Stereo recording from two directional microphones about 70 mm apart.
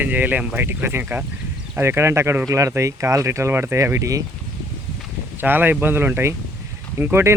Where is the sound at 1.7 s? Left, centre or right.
Right.